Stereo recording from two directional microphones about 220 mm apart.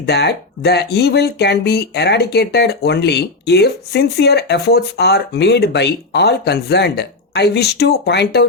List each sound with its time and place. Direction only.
0.0 s speech: 50° left (ahead or behind)